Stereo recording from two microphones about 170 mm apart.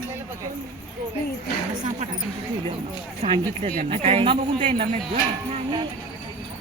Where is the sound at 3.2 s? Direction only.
35° right (ahead or behind).